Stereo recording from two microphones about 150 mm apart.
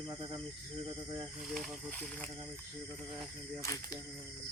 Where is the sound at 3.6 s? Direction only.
20° left (ahead or behind).